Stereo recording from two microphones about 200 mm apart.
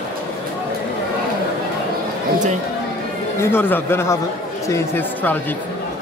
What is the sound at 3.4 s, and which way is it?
Speech, 10° left (ahead or behind).